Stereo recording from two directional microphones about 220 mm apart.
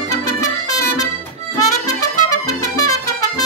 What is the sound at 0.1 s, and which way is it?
Music, 15° left (ahead or behind).